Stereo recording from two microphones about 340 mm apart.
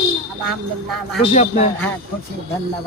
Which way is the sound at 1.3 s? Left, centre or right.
Centre.